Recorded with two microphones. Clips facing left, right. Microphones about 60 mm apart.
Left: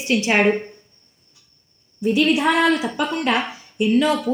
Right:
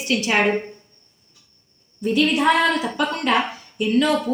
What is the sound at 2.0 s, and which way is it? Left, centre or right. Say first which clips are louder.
A woman's voice: left 1 dB; centre.